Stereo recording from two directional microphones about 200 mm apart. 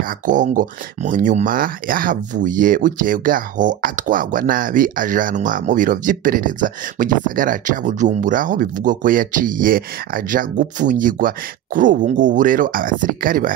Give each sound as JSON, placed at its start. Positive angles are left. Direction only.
{"t": 0.0, "sound": "speech", "side_deg": -40}